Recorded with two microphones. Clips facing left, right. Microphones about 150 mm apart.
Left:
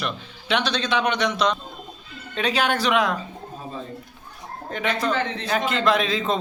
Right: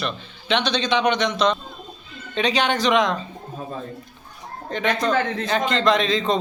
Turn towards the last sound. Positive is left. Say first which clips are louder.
# right 2 dB
turn(degrees=5)  # may be behind; listen again after turning